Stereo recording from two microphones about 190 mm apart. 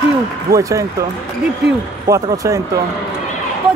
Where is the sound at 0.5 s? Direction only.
15° right (ahead or behind).